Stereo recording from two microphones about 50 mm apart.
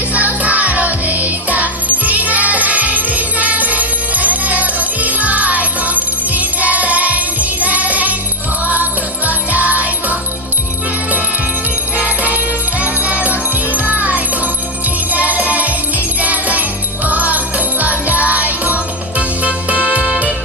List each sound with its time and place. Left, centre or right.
0.1 s music: right
7.6 s jingle bell: right
8.6 s music: right
11.9 s jingle bell: right
12.8 s music: right
16.2 s jingle bell: right
17.1 s music: right